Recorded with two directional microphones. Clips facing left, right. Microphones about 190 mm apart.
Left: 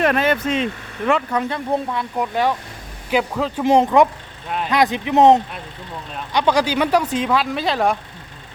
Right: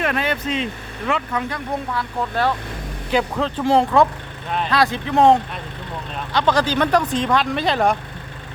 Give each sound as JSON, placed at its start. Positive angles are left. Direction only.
{"t": 0.0, "sound": "speech", "side_deg": 45}
{"t": 1.5, "sound": "speech", "side_deg": 25}
{"t": 3.6, "sound": "speech", "side_deg": 15}